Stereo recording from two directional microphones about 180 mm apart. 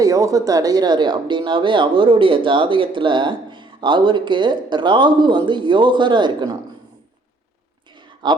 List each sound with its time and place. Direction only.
0.0 s speech: 20° right (ahead or behind)
8.2 s speech: 25° right (ahead or behind)